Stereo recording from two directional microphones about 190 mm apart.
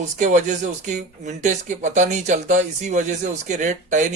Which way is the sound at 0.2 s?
40° right (ahead or behind).